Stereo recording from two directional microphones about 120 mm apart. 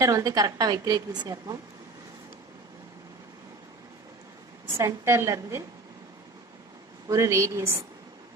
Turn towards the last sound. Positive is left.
turn(degrees=-25)  # may be behind; listen again after turning